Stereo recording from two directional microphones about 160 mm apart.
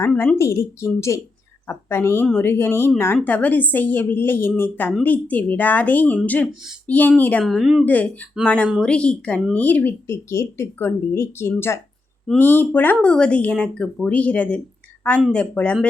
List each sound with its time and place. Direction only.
0.0 s speech: 10° left (ahead or behind)
7.9 s speech: 10° left (ahead or behind)